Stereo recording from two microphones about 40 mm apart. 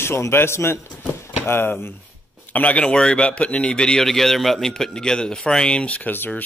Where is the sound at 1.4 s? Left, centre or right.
Left.